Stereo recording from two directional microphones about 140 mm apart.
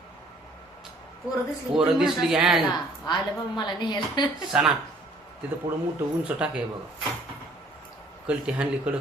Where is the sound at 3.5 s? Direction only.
30° left (ahead or behind).